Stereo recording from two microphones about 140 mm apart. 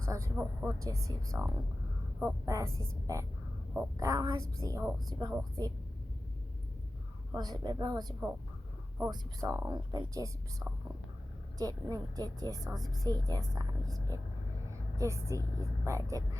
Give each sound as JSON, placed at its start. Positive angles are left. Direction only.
{"t": 0.0, "sound": "a woman's voice", "side_deg": -20}
{"t": 7.3, "sound": "a woman's voice", "side_deg": -30}
{"t": 11.5, "sound": "a woman's voice", "side_deg": -25}